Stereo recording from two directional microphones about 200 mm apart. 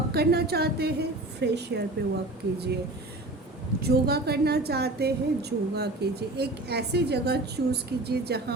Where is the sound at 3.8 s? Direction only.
50° right (ahead or behind).